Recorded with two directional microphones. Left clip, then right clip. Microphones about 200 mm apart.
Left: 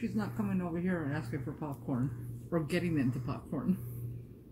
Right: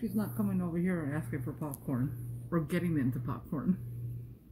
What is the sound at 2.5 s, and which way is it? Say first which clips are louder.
Speech: left 1 dB; 45° right (ahead or behind).